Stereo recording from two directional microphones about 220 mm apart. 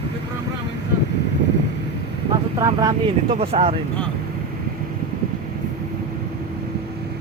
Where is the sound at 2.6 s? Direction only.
15° right (ahead or behind).